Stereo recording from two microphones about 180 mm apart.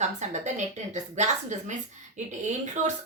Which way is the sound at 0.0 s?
40° right (ahead or behind).